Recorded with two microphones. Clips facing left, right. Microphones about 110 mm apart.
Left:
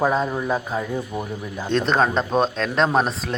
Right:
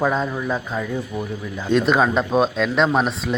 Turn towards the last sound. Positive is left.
turn(degrees=0)  # may be behind; listen again after turning